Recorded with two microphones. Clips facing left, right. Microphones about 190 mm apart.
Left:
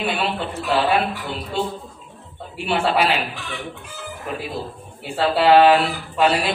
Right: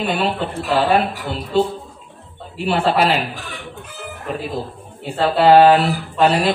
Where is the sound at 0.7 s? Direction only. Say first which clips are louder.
Right 3 dB; 45° right (ahead or behind).